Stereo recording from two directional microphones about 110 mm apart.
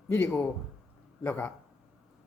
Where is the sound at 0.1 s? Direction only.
20° left (ahead or behind).